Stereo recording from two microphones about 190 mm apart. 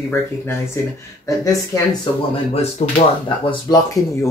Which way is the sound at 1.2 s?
15° left (ahead or behind).